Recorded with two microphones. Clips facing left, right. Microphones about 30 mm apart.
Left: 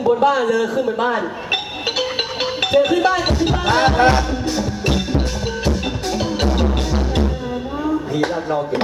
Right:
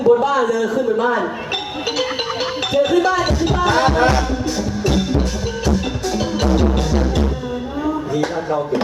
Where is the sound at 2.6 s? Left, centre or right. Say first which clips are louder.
Left 1 dB; left.